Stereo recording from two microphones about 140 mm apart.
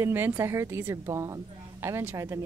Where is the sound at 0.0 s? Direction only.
15° right (ahead or behind).